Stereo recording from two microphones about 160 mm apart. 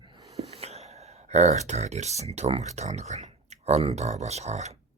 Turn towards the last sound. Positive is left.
turn(degrees=-45)  # may be behind; listen again after turning